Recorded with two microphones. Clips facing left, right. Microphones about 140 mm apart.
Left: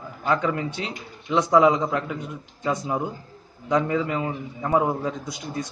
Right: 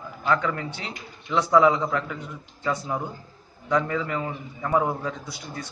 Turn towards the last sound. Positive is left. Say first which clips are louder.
# left 5 dB
turn(degrees=15)  # may be behind; listen again after turning